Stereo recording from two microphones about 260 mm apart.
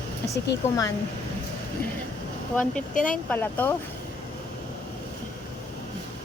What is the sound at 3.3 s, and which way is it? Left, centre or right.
Speech, centre.